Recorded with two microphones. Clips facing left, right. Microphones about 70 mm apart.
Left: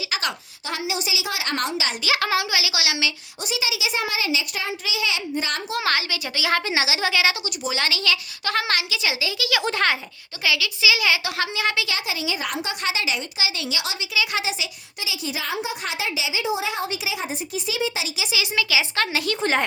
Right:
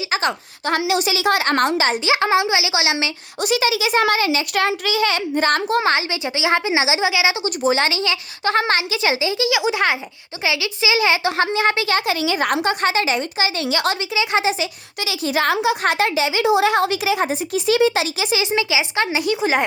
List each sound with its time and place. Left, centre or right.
0.1 s a woman's voice: right
0.8 s a child's voice: right
2.0 s a woman's voice: right
3.4 s a child's voice: right
5.8 s a woman's voice: right
7.4 s a woman's voice: right
9.6 s speech: centre
10.4 s a woman's voice: right
12.6 s a child's voice: right
14.2 s a woman's voice: right
15.0 s a woman's voice: right
15.8 s a woman's voice: right
18.3 s speech: right